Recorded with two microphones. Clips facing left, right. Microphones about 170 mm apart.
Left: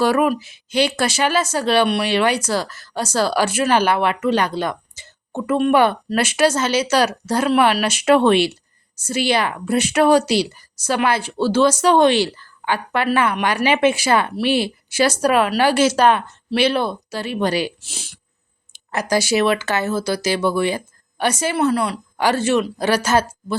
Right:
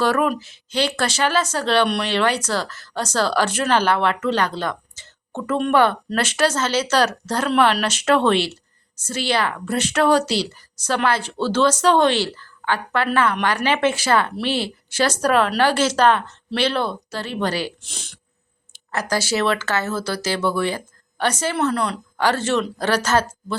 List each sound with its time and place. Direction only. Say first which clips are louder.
0.0 s speech: left 3 dB; 10° left (ahead or behind)